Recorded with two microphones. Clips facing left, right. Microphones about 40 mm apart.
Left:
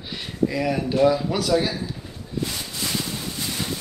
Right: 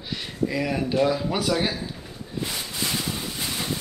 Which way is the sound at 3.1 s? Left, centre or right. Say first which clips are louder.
Even; centre.